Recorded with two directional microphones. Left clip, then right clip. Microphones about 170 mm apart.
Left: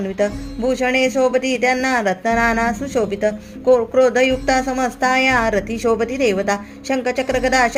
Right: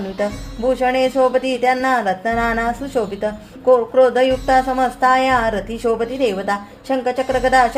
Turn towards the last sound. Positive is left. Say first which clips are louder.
# right 2 dB
turn(degrees=40)  # may be behind; listen again after turning